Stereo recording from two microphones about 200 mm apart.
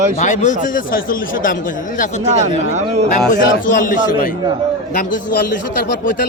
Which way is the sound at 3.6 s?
40° left (ahead or behind).